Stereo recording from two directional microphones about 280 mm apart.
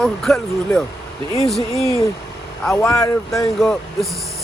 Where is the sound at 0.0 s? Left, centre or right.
Centre.